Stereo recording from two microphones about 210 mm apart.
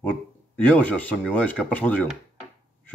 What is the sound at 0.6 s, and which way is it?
Speech, 5° left (ahead or behind).